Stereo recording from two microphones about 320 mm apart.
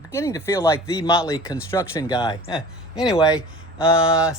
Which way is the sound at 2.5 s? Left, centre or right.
Centre.